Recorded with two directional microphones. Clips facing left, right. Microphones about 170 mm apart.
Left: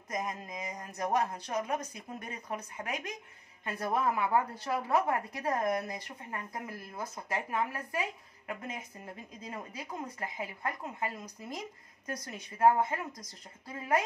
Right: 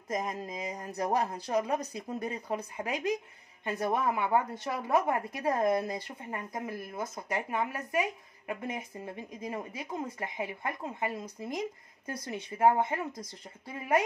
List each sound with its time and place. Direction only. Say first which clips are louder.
0.1 s speech: right 3 dB; 20° right (ahead or behind)